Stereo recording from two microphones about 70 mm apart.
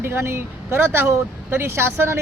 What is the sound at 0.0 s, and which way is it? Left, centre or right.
Speech, right.